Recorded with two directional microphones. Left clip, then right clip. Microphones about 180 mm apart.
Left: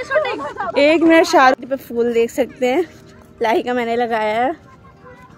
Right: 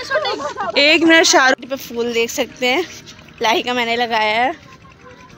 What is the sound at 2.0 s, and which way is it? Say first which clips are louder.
Speech: left 2 dB; 50° left (ahead or behind).